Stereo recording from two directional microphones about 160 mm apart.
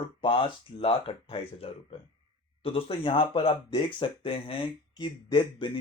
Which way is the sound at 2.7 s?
35° left (ahead or behind).